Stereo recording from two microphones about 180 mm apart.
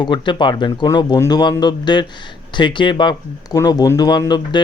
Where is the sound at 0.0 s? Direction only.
25° left (ahead or behind).